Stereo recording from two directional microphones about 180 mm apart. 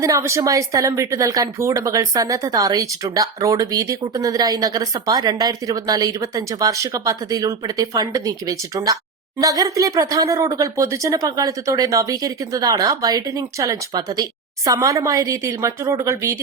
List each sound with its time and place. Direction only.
0.0 s speech: 15° right (ahead or behind)